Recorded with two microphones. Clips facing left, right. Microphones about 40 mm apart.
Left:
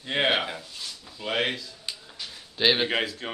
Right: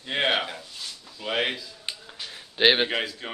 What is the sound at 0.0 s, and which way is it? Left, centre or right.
Speech, centre.